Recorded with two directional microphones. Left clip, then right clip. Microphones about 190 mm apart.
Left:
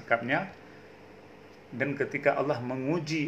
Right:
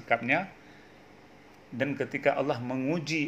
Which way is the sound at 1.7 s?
35° right (ahead or behind).